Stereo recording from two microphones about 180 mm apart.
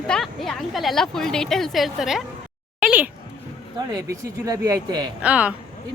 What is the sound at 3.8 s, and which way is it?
Speech, 20° right (ahead or behind).